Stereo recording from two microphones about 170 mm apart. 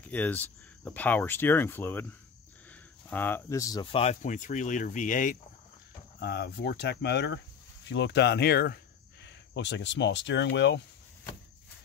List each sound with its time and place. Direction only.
0.0 s speech: 10° left (ahead or behind)
3.8 s speech: 35° left (ahead or behind); by 5.4 s 50° left (ahead or behind)
6.1 s speech: 70° left (ahead or behind)
9.2 s speech: 90° left